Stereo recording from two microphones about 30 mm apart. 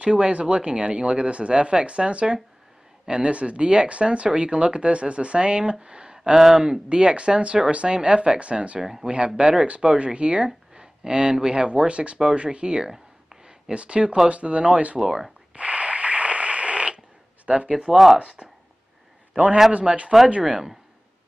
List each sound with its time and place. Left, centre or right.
0.0 s speech: right
6.3 s speech: centre
6.6 s speech: right
10.7 s a sound: right
11.4 s speech: right
15.5 s a sound: right
17.9 s speech: centre
18.2 s a man's voice: right